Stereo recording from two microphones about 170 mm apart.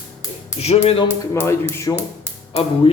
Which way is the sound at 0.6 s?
40° left (ahead or behind).